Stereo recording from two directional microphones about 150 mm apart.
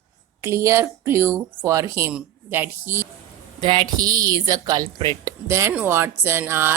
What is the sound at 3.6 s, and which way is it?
Speech, 30° right (ahead or behind).